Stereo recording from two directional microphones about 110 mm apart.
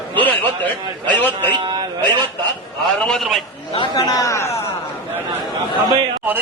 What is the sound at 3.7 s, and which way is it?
Speech, 40° left (ahead or behind).